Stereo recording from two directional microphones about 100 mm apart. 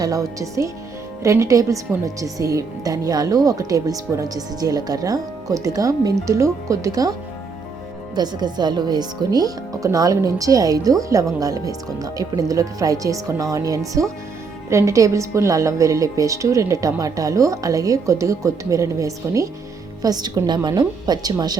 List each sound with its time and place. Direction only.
0.0 s speech: 35° right (ahead or behind)
8.1 s a woman's voice: 45° right (ahead or behind)